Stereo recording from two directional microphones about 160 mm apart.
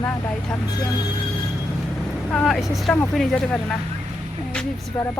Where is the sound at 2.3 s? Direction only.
Centre (ahead or behind).